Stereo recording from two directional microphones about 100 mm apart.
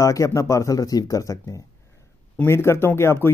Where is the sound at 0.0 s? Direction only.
30° left (ahead or behind).